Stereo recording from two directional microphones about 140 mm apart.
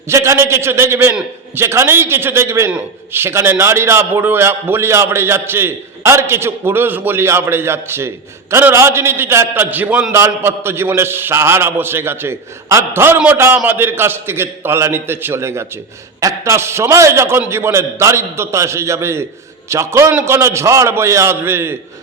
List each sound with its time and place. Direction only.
0.1 s a man's voice: 20° right (ahead or behind)